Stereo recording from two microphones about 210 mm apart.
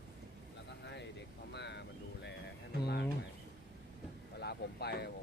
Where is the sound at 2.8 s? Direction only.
50° left (ahead or behind).